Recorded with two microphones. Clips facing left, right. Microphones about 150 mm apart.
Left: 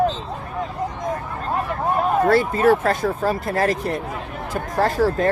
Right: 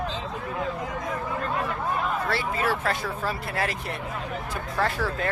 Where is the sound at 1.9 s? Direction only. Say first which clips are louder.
Left 13 dB; 45° left (ahead or behind).